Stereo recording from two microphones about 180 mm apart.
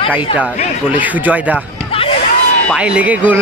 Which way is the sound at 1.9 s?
30° left (ahead or behind).